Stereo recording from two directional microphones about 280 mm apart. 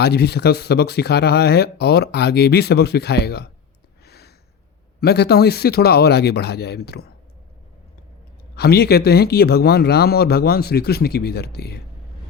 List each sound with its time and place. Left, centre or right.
0.0 s speech: left
4.0 s a sound: left
4.9 s speech: left
8.5 s speech: left